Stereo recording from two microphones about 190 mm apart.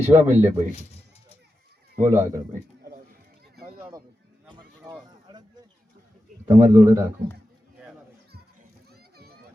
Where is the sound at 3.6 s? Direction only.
20° right (ahead or behind).